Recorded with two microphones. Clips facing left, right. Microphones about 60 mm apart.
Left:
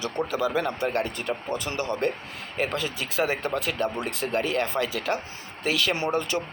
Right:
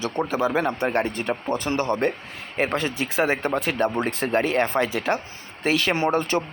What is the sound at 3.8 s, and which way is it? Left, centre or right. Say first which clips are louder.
Speech: right 5 dB; right.